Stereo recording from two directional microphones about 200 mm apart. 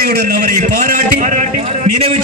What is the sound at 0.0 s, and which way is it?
A man's voice, 45° right (ahead or behind).